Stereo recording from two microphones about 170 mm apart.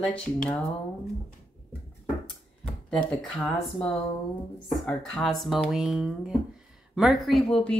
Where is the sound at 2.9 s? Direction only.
5° left (ahead or behind).